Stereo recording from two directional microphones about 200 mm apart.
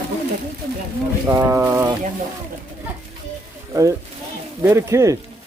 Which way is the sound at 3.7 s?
15° right (ahead or behind).